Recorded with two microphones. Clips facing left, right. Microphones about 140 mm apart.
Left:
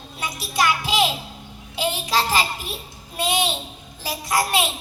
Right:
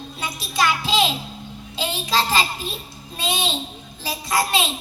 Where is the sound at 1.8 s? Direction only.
15° left (ahead or behind).